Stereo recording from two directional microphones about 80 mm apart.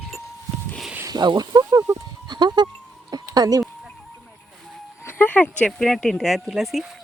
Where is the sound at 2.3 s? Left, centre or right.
Right.